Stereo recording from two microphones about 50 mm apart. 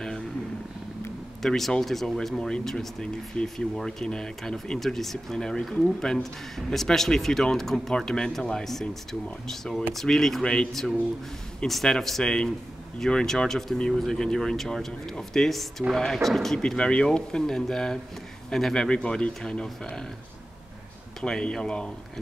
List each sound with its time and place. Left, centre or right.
1.4 s speech: centre
9.9 s speech: centre
16.5 s speech: centre
21.2 s speech: centre